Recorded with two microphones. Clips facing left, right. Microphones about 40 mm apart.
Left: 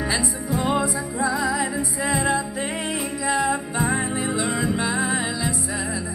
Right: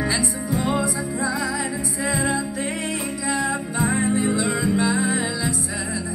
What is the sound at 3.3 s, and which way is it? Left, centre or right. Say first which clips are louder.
Music: left 2 dB; centre.